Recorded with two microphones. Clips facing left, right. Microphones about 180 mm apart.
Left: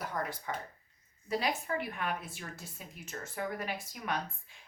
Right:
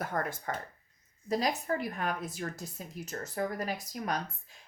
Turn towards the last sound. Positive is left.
turn(degrees=-40)  # may be behind; listen again after turning